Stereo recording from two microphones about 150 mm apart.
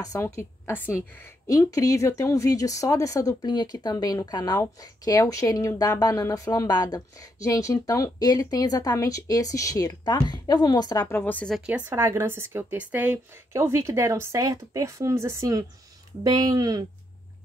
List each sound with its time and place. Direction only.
0.0 s a woman's voice: 20° left (ahead or behind)
11.1 s a woman's voice: 15° left (ahead or behind)
11.5 s speech: 5° right (ahead or behind); by 16.8 s 25° right (ahead or behind)